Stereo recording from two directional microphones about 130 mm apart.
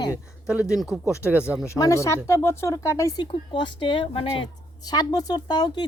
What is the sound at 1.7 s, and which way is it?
Speech, 25° left (ahead or behind).